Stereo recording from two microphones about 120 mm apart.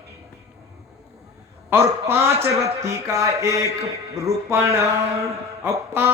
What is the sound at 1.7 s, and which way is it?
A man's voice, 20° right (ahead or behind).